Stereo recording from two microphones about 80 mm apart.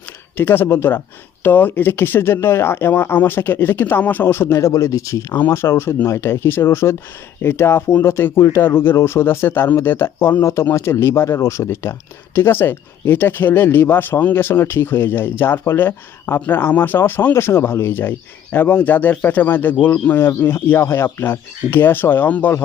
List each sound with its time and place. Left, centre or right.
0.3 s speech: left